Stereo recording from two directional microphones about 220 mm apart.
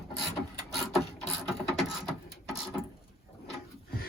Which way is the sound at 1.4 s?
Centre (ahead or behind).